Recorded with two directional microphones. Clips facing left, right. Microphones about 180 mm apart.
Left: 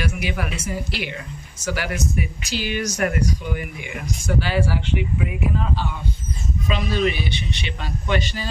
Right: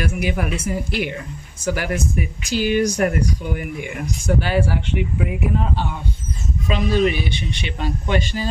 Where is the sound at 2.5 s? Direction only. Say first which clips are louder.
Right 10 dB; 45° right (ahead or behind).